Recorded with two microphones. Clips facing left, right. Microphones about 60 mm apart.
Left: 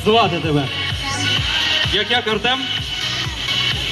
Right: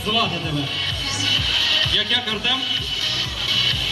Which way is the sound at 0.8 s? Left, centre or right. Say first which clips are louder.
Left 3 dB; left.